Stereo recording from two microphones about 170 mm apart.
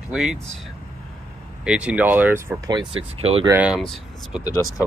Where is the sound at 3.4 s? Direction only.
10° right (ahead or behind).